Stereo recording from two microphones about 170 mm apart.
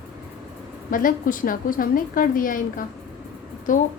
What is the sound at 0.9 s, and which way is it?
A woman's voice, 55° left (ahead or behind).